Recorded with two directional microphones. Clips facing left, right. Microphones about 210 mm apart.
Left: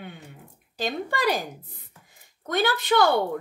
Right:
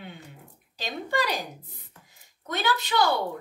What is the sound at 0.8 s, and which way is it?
A woman's voice, 50° left (ahead or behind).